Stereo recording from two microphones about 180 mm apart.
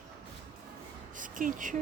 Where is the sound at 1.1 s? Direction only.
45° right (ahead or behind).